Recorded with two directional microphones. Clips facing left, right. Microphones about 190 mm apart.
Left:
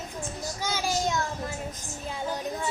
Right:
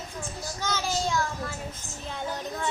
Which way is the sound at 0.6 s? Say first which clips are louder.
Left 1 dB; 10° left (ahead or behind).